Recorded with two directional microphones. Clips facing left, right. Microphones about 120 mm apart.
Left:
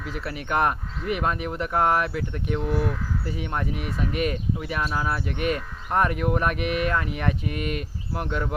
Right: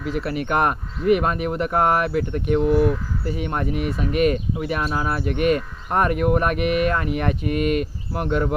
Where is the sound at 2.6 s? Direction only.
10° right (ahead or behind).